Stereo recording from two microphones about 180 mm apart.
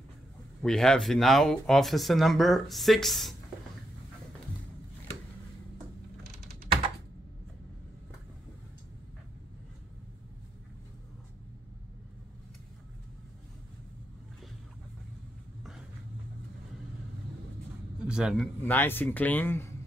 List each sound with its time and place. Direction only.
0.6 s speech: centre (ahead or behind)
18.0 s speech: 5° right (ahead or behind); by 19.7 s 10° left (ahead or behind)